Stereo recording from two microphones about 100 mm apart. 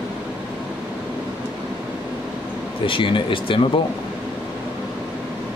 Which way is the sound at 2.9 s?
55° left (ahead or behind).